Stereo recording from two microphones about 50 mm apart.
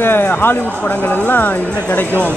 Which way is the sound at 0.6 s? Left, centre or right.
Left.